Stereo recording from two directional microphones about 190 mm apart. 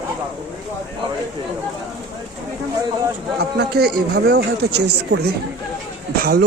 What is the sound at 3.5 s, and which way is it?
Speech, 55° right (ahead or behind).